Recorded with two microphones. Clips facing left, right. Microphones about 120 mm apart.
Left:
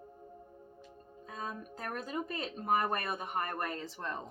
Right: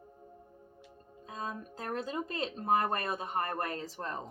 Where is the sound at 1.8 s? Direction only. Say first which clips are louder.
Right 2 dB; 30° right (ahead or behind).